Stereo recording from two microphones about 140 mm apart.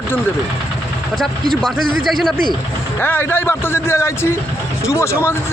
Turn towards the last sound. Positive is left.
turn(degrees=20)  # may be behind; listen again after turning